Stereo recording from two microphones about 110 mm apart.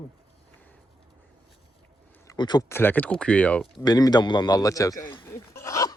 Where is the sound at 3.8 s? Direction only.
35° left (ahead or behind).